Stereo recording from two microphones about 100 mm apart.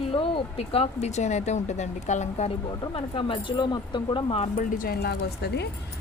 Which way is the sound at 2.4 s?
90° left.